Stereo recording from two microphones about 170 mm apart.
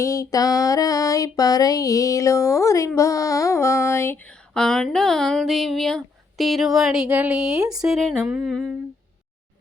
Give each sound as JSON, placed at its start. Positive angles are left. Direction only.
{"t": 0.0, "sound": "music", "side_deg": 20}
{"t": 4.5, "sound": "speech", "side_deg": 5}